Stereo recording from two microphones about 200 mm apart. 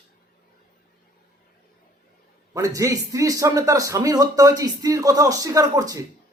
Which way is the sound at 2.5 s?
15° right (ahead or behind).